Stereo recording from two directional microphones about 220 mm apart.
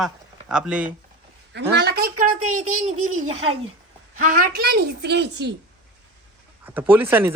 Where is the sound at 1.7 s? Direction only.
45° right (ahead or behind).